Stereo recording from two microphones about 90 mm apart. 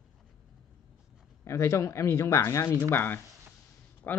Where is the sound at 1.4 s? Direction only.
30° left (ahead or behind).